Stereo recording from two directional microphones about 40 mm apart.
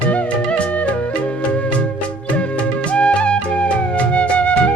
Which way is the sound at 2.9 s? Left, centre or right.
Left.